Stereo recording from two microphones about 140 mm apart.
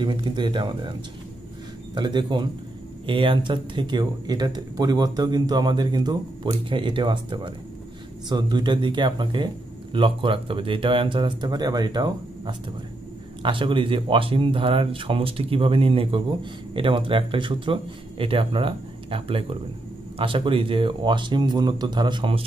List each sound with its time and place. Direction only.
0.0 s speech: 35° right (ahead or behind)
2.0 s speech: 30° right (ahead or behind)